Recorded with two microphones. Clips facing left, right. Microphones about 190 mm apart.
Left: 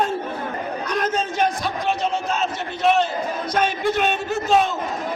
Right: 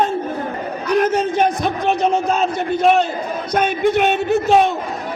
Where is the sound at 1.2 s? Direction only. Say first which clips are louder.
Right 5 dB; 60° right (ahead or behind).